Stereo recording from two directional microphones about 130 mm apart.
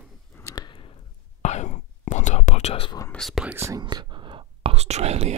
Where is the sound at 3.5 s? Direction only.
20° right (ahead or behind).